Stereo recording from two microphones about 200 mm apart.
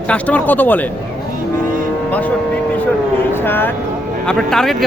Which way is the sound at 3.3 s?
10° left (ahead or behind).